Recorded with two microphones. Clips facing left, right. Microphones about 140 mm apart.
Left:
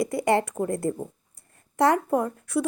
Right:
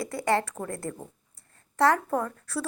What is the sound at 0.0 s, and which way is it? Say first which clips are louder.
Speech: left 4 dB; 20° left (ahead or behind).